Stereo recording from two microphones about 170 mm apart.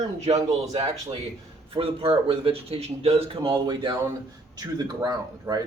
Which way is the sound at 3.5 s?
25° right (ahead or behind).